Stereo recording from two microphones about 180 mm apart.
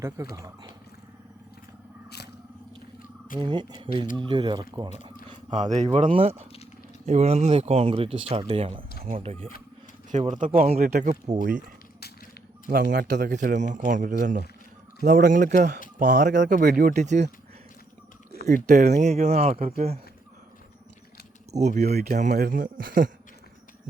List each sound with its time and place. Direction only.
0.3 s speech: 20° right (ahead or behind)
2.0 s a sound: 65° left (ahead or behind)
3.3 s speech: 25° right (ahead or behind)
5.3 s a sound: 40° right (ahead or behind)
5.7 s speech: 40° right (ahead or behind)
12.7 s speech: 50° right (ahead or behind)
13.1 s speech: 70° right (ahead or behind)
13.3 s speech: 45° right (ahead or behind)
18.5 s speech: 45° right (ahead or behind)
21.5 s speech: 40° right (ahead or behind)